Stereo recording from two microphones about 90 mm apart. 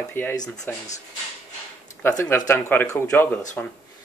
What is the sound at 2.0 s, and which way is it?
Speech, 25° left (ahead or behind).